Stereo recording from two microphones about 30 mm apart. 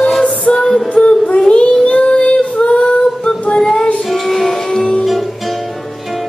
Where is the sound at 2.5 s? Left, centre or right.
Left.